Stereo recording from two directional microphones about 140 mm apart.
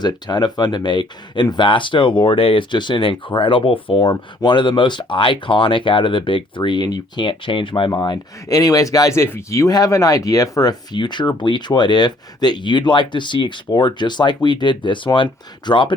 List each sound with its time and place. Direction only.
0.0 s speech: 30° left (ahead or behind)